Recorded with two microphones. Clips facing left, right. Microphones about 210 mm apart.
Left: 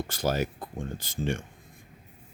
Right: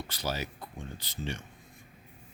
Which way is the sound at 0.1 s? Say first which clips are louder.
Left 7 dB; 50° left (ahead or behind).